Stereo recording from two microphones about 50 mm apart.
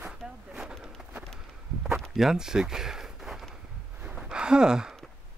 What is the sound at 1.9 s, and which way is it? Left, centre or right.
Walk, centre.